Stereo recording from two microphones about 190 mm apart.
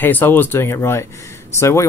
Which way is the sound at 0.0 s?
10° left (ahead or behind).